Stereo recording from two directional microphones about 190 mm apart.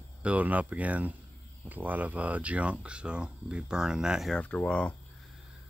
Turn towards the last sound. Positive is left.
turn(degrees=5)  # may be behind; listen again after turning